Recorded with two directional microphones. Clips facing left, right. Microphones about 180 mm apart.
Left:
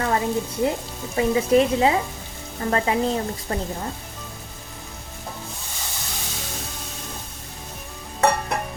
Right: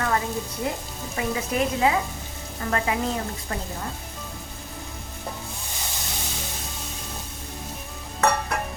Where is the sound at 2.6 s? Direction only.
30° left (ahead or behind).